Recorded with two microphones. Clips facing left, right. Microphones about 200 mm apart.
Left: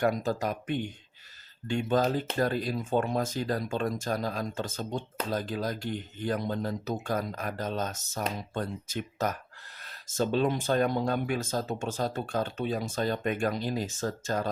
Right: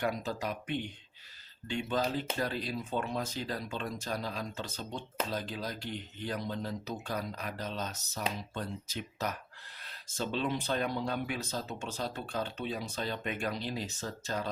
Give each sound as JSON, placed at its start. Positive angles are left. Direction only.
{"t": 0.0, "sound": "speech", "side_deg": 45}